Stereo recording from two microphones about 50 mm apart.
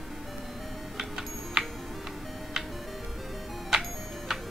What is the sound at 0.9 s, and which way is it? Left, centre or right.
Music, centre.